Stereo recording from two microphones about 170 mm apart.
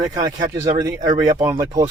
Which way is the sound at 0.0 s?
20° right (ahead or behind).